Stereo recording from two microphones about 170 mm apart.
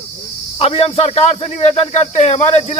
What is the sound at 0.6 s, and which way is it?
Speech, 35° left (ahead or behind).